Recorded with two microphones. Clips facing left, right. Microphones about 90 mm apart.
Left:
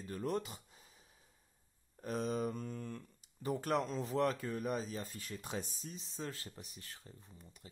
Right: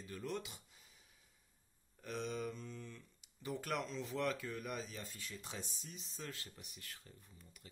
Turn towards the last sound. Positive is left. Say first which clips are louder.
# left 2 dB
turn(degrees=30)  # may be behind; listen again after turning